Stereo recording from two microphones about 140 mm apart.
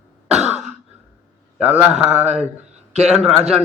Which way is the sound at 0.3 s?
5° right (ahead or behind).